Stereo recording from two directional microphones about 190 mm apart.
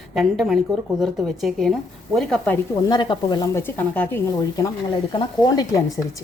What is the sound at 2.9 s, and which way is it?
Speech, 25° left (ahead or behind).